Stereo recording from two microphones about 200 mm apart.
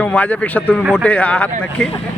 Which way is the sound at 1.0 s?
5° left (ahead or behind).